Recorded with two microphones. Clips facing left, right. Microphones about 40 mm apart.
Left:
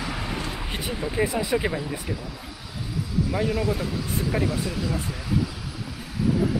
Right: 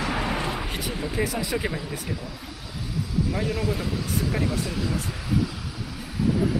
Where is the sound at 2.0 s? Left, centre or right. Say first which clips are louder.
Left 1 dB; centre.